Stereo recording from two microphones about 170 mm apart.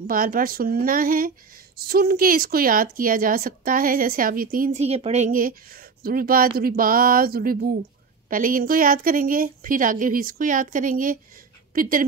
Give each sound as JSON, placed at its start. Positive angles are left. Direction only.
{"t": 0.0, "sound": "a woman's voice", "side_deg": -55}